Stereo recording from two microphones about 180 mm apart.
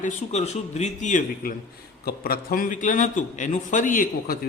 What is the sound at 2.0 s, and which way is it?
A man's voice, 55° left (ahead or behind).